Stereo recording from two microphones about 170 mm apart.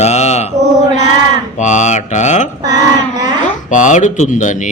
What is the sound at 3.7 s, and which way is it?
Speech, 45° left (ahead or behind).